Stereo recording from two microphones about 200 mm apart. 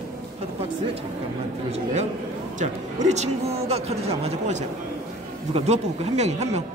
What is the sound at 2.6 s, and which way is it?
A man's voice, 35° right (ahead or behind).